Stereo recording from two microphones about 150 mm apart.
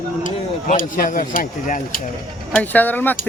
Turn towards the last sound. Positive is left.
turn(degrees=10)  # may be behind; listen again after turning